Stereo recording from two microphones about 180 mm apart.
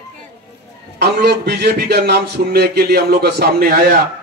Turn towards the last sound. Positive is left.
turn(degrees=-55)  # may be behind; listen again after turning